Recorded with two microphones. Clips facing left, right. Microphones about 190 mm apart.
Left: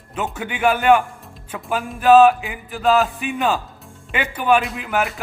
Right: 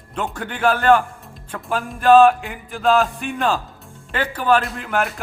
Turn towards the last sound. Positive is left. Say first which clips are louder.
# even
turn(degrees=0)  # may be behind; listen again after turning